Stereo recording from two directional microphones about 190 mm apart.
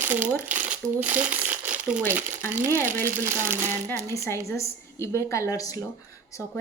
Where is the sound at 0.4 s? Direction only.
10° right (ahead or behind).